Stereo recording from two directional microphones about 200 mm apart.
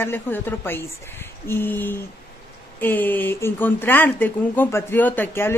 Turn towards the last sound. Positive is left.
turn(degrees=10)  # may be behind; listen again after turning